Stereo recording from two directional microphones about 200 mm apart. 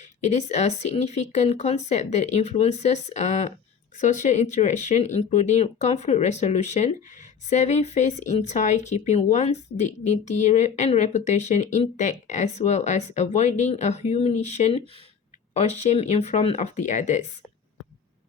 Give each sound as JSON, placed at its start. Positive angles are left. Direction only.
{"t": 0.0, "sound": "speech", "side_deg": 35}